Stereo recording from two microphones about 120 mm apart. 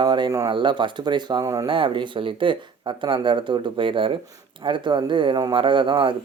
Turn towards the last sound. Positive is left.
turn(degrees=-45)  # may be behind; listen again after turning